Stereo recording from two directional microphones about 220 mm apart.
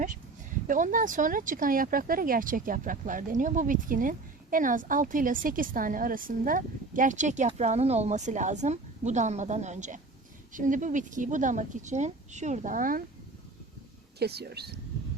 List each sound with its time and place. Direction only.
0.7 s a woman's voice: 35° right (ahead or behind)
14.2 s speech: 45° right (ahead or behind)